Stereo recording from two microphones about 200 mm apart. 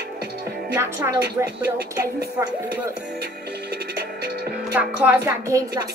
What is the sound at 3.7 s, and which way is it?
Music, 50° right (ahead or behind).